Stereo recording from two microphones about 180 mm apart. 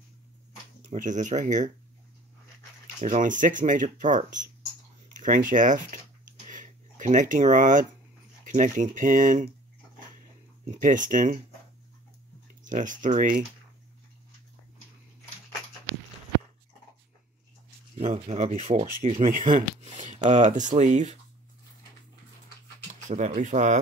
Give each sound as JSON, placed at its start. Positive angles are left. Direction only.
{"t": 0.9, "sound": "speech", "side_deg": -45}
{"t": 3.0, "sound": "speech", "side_deg": -45}
{"t": 6.4, "sound": "a sound", "side_deg": -45}
{"t": 8.5, "sound": "speech", "side_deg": -45}
{"t": 10.7, "sound": "speech", "side_deg": -45}
{"t": 12.6, "sound": "speech", "side_deg": -45}
{"t": 17.9, "sound": "speech", "side_deg": -35}
{"t": 23.0, "sound": "speech", "side_deg": -40}